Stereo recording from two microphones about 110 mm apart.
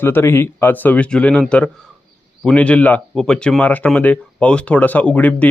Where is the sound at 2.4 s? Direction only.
10° left (ahead or behind).